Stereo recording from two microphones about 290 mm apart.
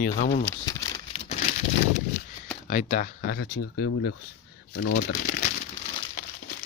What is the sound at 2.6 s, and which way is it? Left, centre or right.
Speech, left.